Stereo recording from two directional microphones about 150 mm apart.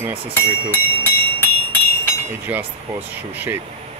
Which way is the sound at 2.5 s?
10° right (ahead or behind).